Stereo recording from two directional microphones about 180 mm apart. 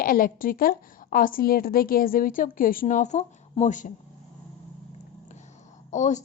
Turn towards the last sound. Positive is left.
turn(degrees=40)  # may be behind; listen again after turning